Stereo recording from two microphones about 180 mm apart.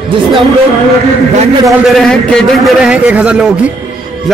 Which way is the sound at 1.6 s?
Centre (ahead or behind).